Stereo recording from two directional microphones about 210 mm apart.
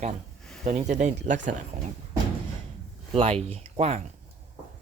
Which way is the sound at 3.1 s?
25° right (ahead or behind).